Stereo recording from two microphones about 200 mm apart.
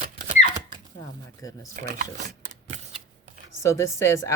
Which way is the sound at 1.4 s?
15° left (ahead or behind).